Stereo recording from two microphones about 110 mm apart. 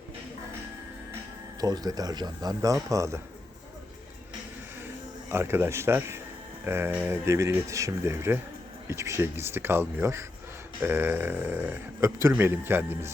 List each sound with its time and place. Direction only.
1.6 s speech: 35° right (ahead or behind)
5.3 s speech: 20° right (ahead or behind)